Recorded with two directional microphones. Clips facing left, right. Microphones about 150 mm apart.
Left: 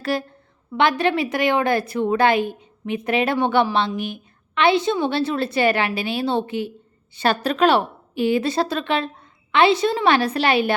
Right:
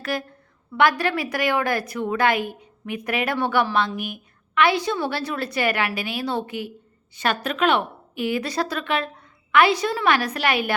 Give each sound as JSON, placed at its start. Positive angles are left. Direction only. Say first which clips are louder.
{"t": 0.0, "sound": "a woman's voice", "louder": "left 4 dB", "side_deg": 30}